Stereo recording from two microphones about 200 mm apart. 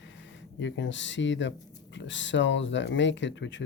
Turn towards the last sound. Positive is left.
turn(degrees=65)  # may be behind; listen again after turning